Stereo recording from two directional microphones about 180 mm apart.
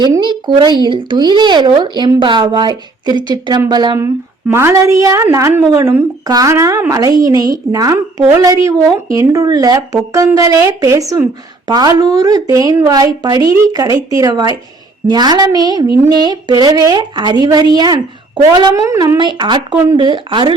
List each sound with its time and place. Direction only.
0.0 s speech: 25° right (ahead or behind)